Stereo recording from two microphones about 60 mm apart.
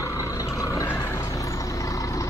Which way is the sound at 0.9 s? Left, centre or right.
Left.